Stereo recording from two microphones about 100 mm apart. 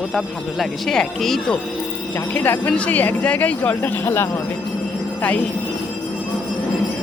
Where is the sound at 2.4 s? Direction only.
15° left (ahead or behind).